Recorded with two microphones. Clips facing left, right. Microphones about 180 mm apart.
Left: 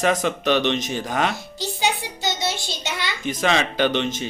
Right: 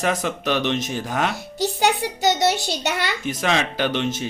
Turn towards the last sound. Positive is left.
turn(degrees=-5)  # may be behind; listen again after turning